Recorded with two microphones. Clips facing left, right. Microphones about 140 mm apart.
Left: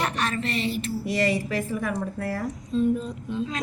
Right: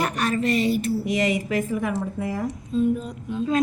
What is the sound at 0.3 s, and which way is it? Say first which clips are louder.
Speech: right 6 dB; 40° right (ahead or behind).